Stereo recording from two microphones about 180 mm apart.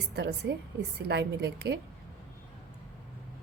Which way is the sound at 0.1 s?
65° right (ahead or behind).